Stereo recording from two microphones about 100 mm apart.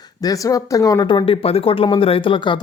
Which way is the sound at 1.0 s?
60° left (ahead or behind).